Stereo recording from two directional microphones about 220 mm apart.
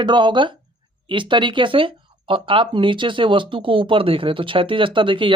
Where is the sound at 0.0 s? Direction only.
20° right (ahead or behind).